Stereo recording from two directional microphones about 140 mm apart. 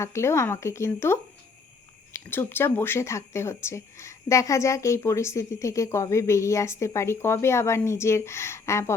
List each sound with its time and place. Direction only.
0.0 s speech: 20° left (ahead or behind)
2.3 s speech: 15° left (ahead or behind)